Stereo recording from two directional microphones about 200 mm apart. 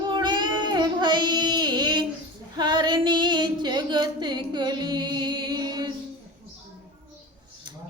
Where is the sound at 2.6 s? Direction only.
20° right (ahead or behind).